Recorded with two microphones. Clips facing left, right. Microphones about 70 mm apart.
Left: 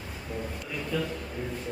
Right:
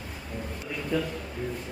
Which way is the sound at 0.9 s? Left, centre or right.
Centre.